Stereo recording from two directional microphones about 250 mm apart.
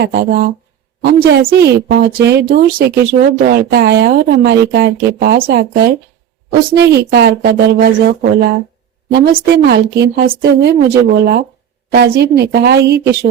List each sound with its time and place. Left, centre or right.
0.0 s speech: right